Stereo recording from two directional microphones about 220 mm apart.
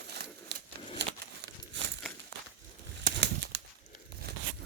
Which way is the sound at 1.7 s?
55° right (ahead or behind).